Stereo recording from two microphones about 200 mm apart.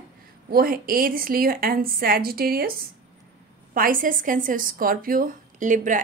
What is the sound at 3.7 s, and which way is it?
A woman's voice, 45° right (ahead or behind).